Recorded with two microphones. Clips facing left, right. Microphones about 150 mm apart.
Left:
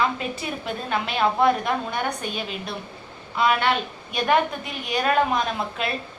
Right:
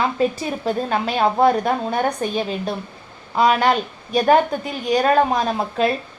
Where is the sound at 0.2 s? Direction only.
40° right (ahead or behind).